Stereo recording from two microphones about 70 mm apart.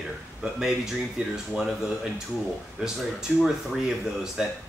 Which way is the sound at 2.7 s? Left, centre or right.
Centre.